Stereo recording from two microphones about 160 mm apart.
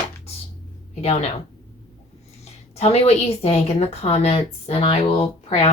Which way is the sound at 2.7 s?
40° left (ahead or behind).